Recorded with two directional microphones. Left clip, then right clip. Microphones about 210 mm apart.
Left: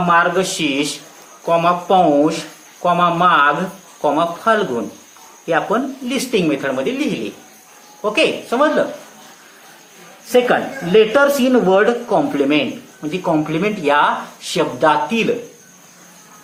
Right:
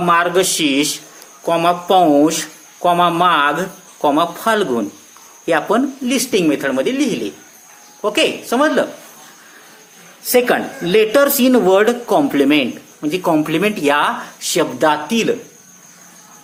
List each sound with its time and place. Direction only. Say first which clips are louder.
0.0 s speech: even; 45° right (ahead or behind)
10.3 s speech: even; 45° right (ahead or behind)